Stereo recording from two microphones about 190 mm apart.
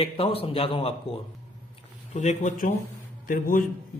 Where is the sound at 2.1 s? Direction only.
40° left (ahead or behind).